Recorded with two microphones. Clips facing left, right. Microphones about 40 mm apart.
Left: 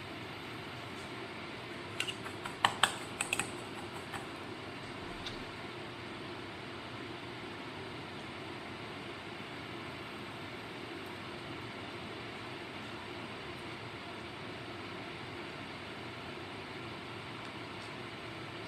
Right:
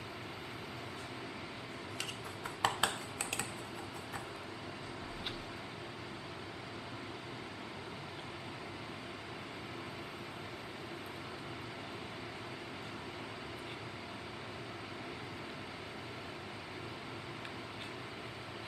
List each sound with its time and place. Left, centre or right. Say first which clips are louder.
2.6 s typing: left 3 dB; left